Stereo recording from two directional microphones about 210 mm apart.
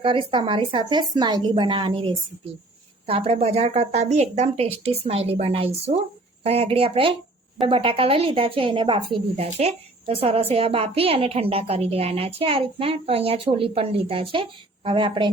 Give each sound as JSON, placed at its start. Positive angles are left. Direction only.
{"t": 0.0, "sound": "a woman's voice", "side_deg": -25}